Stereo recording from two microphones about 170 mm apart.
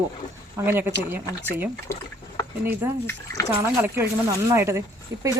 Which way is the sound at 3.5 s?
15° right (ahead or behind).